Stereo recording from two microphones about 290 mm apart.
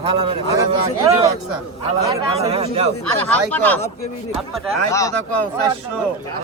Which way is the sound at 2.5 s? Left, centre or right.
Right.